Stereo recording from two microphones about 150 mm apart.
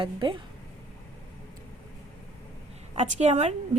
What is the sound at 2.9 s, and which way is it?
Speech, 50° right (ahead or behind).